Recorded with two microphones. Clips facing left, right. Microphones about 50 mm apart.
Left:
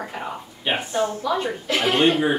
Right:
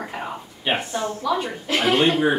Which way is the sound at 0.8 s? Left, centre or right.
Centre.